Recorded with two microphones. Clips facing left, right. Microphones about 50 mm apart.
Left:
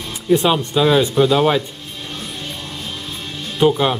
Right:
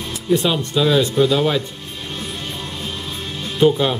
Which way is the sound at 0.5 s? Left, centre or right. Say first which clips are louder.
Left 2 dB; centre.